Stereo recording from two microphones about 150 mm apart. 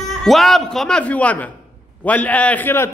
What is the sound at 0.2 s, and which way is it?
A man's voice, centre (ahead or behind).